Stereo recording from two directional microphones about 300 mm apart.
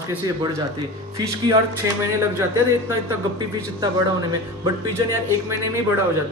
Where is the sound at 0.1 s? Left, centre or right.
Centre.